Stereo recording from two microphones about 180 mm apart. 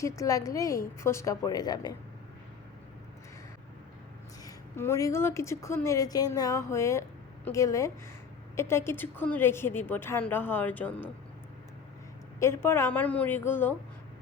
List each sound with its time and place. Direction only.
0.0 s a woman's voice: 20° left (ahead or behind)
4.4 s a woman's voice: 15° left (ahead or behind)
12.4 s a woman's voice: 15° left (ahead or behind)